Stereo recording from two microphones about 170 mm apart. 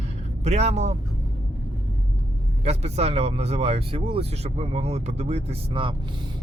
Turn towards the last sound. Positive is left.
turn(degrees=-30)  # may be behind; listen again after turning